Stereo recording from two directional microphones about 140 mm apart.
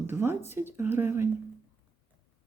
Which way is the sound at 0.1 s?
15° right (ahead or behind).